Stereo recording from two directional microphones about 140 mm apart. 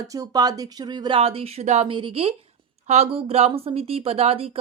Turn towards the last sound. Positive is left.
turn(degrees=-45)  # may be behind; listen again after turning